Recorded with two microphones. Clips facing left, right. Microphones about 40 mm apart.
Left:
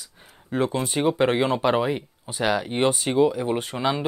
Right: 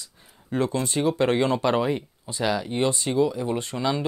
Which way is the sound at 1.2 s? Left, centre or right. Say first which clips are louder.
Even; centre.